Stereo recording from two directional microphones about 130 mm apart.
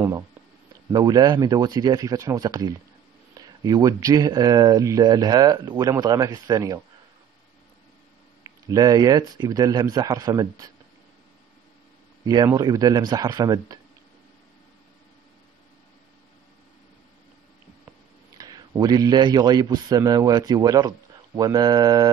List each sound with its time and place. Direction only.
0.9 s speech: 30° right (ahead or behind)
8.6 s speech: 30° right (ahead or behind)
12.5 s speech: 30° right (ahead or behind)
18.4 s a man's voice: 35° right (ahead or behind)